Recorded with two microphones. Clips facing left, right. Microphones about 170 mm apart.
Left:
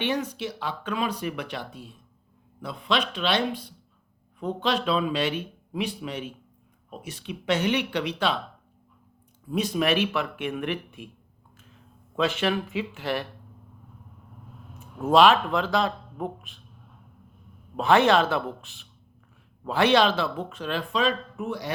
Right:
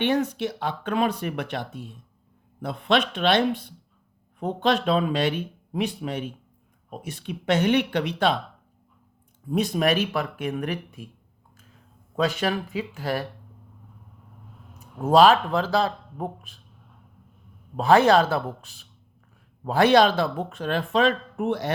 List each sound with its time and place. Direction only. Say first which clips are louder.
0.0 s speech: right 5 dB; 50° right (ahead or behind)
9.5 s speech: right 2 dB; 45° right (ahead or behind)
12.1 s speech: right 1 dB; 40° right (ahead or behind)
14.9 s speech: right 2 dB; 35° right (ahead or behind)
17.7 s speech: right 2 dB; 35° right (ahead or behind); by 21.7 s 55° right (ahead or behind)